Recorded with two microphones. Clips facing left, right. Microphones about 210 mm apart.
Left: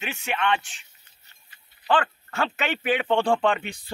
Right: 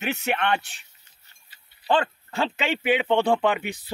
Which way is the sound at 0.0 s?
40° right (ahead or behind).